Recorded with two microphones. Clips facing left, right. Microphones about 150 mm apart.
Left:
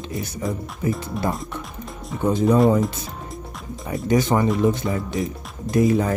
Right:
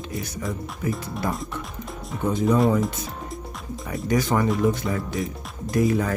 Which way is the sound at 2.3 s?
30° left (ahead or behind).